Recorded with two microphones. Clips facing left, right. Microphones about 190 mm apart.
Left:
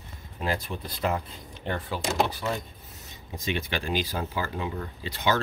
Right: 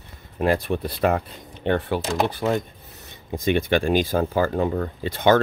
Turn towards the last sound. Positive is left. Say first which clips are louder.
# right 9 dB
turn(degrees=-50)  # may be behind; listen again after turning